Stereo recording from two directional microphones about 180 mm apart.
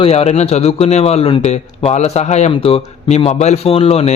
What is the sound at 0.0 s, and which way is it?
Speech, 35° left (ahead or behind).